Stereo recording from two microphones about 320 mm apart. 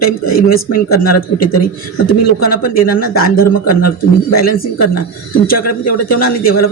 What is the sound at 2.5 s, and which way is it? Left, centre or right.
Speech, left.